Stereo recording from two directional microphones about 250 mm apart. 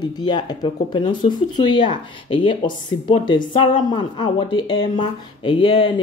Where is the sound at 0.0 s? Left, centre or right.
Centre.